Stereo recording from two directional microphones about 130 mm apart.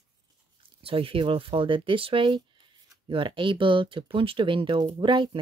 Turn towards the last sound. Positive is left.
turn(degrees=-40)  # may be behind; listen again after turning